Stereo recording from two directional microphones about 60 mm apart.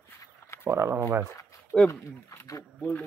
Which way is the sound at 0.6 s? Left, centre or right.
Right.